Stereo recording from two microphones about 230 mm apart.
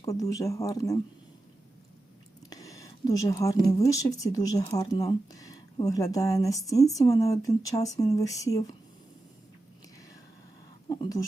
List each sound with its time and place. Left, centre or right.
0.1 s speech: centre
2.5 s speech: centre
10.8 s a sound: centre